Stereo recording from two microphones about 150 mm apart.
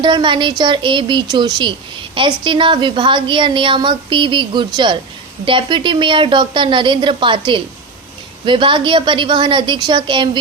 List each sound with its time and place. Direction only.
0.0 s a woman's voice: 30° right (ahead or behind)